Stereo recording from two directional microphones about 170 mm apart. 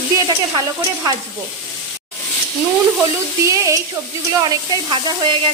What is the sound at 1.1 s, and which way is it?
Speech, 25° right (ahead or behind).